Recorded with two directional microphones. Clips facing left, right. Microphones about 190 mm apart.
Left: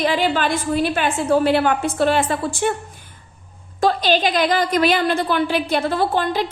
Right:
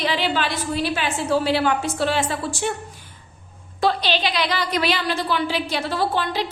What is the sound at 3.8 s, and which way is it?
A woman's voice, 45° left (ahead or behind).